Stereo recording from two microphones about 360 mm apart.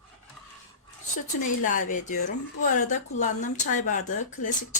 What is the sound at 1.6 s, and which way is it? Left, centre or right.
Speech, left.